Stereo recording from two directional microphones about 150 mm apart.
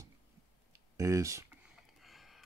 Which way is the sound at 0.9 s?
20° right (ahead or behind).